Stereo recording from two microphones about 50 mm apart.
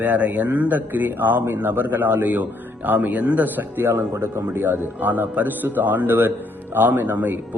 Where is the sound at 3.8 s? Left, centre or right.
Right.